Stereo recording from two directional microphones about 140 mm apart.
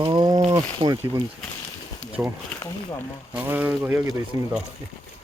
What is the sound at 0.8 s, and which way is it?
Speech, 45° right (ahead or behind).